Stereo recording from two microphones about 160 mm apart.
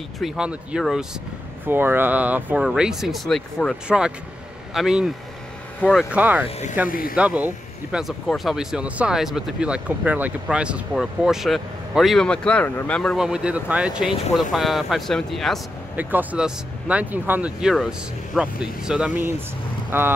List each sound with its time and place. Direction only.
0.2 s speech: 5° right (ahead or behind)
6.9 s speech: 65° left (ahead or behind)
7.2 s speech: 10° right (ahead or behind); by 13.2 s 5° left (ahead or behind)
13.2 s speech: 5° right (ahead or behind)
16.0 s speech: 10° right (ahead or behind)